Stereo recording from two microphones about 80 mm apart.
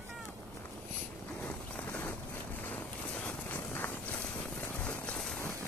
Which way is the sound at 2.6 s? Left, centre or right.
Centre.